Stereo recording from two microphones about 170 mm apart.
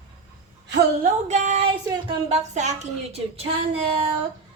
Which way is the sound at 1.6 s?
30° right (ahead or behind).